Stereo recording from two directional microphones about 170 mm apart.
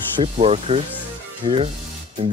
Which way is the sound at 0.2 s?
35° right (ahead or behind).